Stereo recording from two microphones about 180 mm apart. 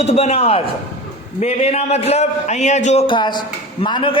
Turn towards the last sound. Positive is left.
turn(degrees=30)  # may be behind; listen again after turning